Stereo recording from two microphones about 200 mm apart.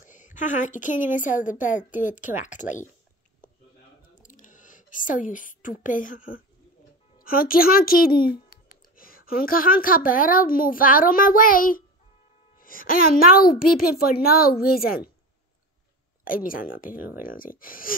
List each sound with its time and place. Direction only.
0.0 s a woman's voice: 40° left (ahead or behind)
4.1 s a sound: 40° left (ahead or behind)
5.3 s a woman's voice: 40° left (ahead or behind)
16.3 s a child's voice: 45° left (ahead or behind)